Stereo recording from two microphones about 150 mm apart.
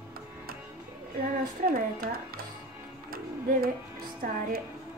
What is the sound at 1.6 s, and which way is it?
Speech, 75° right (ahead or behind).